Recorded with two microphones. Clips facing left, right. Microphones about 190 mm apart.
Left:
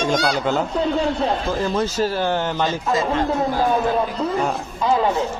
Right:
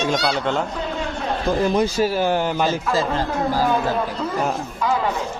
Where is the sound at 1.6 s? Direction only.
10° right (ahead or behind).